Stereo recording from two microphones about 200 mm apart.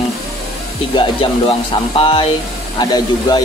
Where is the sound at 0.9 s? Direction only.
25° left (ahead or behind).